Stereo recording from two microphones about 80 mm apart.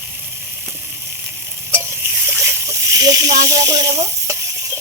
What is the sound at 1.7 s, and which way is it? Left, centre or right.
Stir, right.